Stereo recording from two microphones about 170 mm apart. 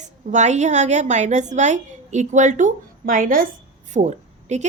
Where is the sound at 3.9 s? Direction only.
45° right (ahead or behind).